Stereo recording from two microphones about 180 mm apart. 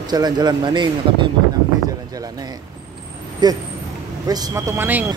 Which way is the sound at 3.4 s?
25° right (ahead or behind).